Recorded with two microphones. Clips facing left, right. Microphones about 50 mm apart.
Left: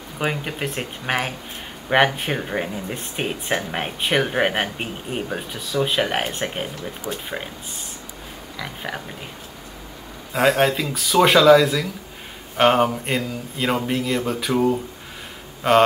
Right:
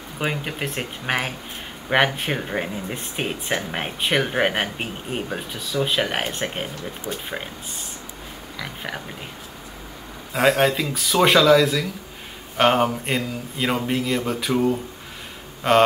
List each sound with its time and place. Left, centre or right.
0.2 s speech: centre
7.1 s speech: centre
8.5 s speech: centre
10.3 s speech: centre